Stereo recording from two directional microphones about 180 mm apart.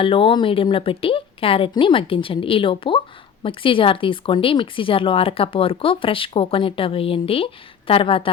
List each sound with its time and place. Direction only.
0.0 s speech: 30° left (ahead or behind)